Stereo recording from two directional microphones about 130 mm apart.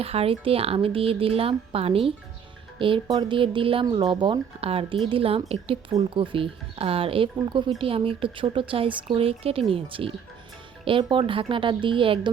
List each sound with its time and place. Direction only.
0.0 s speech: 50° right (ahead or behind)